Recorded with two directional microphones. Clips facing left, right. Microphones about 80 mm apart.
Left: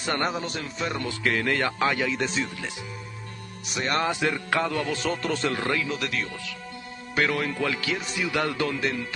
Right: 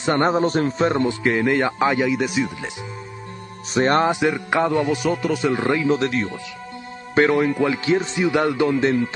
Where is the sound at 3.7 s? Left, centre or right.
Right.